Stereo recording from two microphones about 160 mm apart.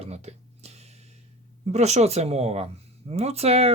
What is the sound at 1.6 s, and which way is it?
Speech, 45° right (ahead or behind).